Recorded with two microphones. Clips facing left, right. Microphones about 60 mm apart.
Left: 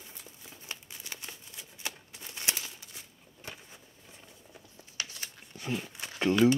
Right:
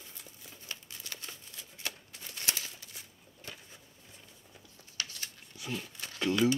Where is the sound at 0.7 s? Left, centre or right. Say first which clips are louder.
Left 1 dB; left.